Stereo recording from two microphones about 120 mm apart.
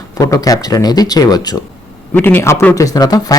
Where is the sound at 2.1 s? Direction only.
15° left (ahead or behind).